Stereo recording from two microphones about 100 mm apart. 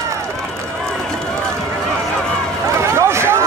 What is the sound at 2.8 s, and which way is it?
Vehicle, 25° right (ahead or behind).